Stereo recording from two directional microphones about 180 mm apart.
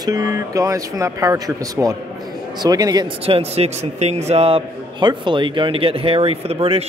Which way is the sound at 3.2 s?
35° right (ahead or behind).